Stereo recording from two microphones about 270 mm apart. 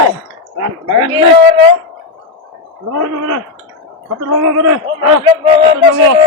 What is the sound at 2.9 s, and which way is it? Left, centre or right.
Speech, right.